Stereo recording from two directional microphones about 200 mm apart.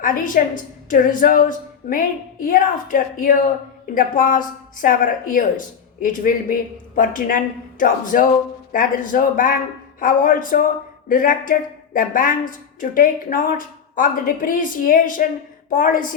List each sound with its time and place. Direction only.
0.0 s a woman's voice: 40° left (ahead or behind)